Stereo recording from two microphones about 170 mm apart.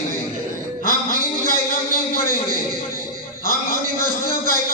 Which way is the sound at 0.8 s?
60° left (ahead or behind).